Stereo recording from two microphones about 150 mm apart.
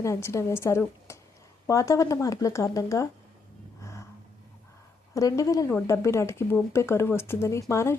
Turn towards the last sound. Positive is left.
turn(degrees=20)  # may be behind; listen again after turning